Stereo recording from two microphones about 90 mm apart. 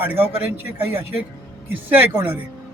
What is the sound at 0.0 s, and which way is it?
A man's voice, 25° right (ahead or behind).